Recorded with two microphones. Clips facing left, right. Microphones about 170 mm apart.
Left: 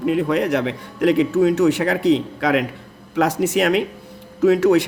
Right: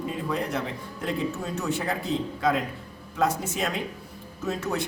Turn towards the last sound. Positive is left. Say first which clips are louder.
# left 15 dB
turn(degrees=90)